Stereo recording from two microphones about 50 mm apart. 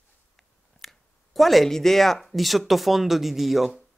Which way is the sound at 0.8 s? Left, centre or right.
Centre.